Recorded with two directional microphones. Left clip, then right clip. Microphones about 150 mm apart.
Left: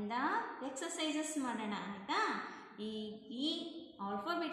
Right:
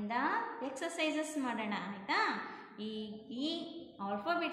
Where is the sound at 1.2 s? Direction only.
10° right (ahead or behind).